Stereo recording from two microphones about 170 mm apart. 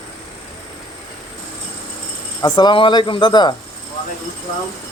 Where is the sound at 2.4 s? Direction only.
25° left (ahead or behind).